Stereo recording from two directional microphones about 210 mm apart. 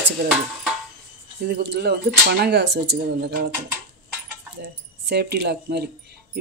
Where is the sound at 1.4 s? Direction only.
55° right (ahead or behind).